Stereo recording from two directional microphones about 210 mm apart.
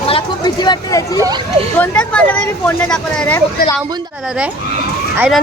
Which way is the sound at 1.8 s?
5° left (ahead or behind).